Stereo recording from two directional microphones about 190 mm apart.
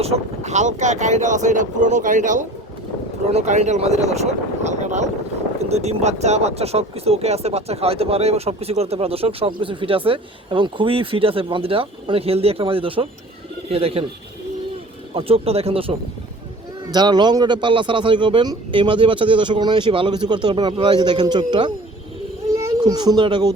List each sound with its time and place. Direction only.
0.0 s speech: 35° right (ahead or behind)
15.1 s a man's voice: 30° right (ahead or behind)